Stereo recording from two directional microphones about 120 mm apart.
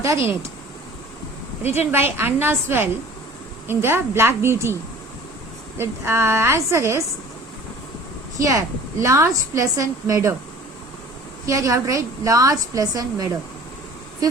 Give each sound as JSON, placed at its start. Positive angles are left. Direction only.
{"t": 0.0, "sound": "a woman's voice", "side_deg": -20}
{"t": 1.6, "sound": "a woman's voice", "side_deg": 65}
{"t": 2.1, "sound": "a woman's voice", "side_deg": -20}
{"t": 8.4, "sound": "a woman's voice", "side_deg": -25}
{"t": 11.4, "sound": "a woman's voice", "side_deg": -25}